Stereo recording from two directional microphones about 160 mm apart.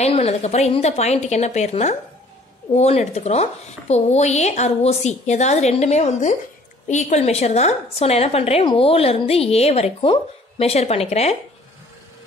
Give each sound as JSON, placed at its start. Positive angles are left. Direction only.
{"t": 0.0, "sound": "a woman's voice", "side_deg": 40}